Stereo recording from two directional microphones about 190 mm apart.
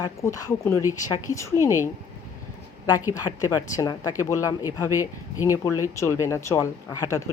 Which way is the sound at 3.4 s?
20° left (ahead or behind).